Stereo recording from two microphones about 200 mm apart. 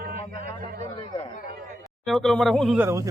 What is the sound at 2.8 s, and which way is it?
Speech, 15° right (ahead or behind).